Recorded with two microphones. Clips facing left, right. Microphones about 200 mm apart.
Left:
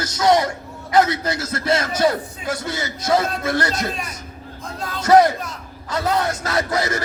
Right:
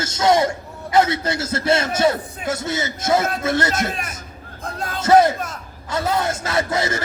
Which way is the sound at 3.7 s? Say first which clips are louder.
Right 1 dB; 50° right (ahead or behind).